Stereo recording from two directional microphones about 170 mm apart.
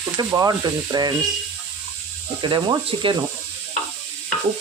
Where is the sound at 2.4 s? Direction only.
30° right (ahead or behind).